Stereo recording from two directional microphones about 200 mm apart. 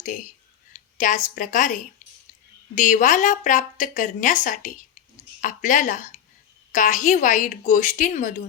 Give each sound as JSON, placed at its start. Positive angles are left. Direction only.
{"t": 0.0, "sound": "a woman's voice", "side_deg": 40}